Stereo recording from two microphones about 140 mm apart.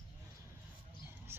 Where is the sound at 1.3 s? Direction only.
15° right (ahead or behind).